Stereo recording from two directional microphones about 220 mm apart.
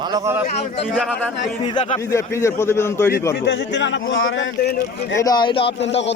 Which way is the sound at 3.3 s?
50° left (ahead or behind).